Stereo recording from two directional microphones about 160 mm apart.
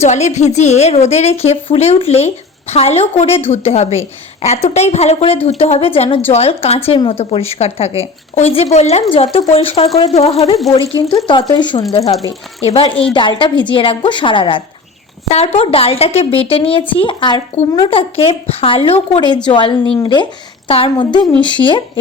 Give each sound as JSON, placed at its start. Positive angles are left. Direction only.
{"t": 0.0, "sound": "a woman's voice", "side_deg": 45}